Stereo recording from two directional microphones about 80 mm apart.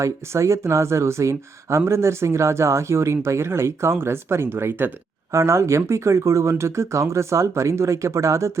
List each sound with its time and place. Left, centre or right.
0.0 s speech: right